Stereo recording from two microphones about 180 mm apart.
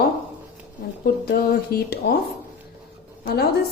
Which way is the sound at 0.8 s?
55° left (ahead or behind).